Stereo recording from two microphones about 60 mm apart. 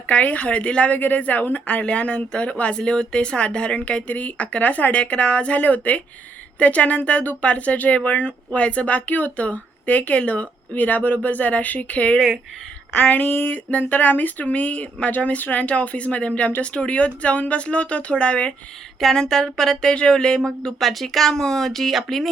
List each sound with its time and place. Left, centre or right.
0.1 s speech: left
18.9 s speech: centre